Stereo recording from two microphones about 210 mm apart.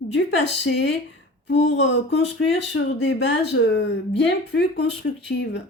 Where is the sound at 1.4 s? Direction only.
55° left (ahead or behind).